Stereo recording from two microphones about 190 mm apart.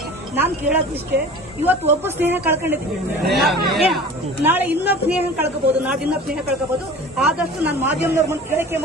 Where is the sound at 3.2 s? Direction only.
60° right (ahead or behind).